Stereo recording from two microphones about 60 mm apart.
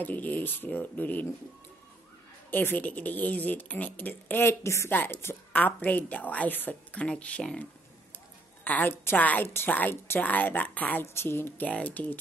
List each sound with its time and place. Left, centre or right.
0.0 s a woman's voice: left
2.5 s a woman's voice: left
4.6 s a woman's voice: left
4.9 s a woman's voice: left
5.5 s a woman's voice: left
8.7 s a woman's voice: left
9.4 s a woman's voice: left
11.1 s a woman's voice: left
11.6 s a woman's voice: left